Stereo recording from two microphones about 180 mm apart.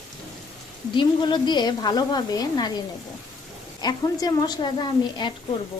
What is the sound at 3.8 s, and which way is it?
A woman's voice, 20° left (ahead or behind).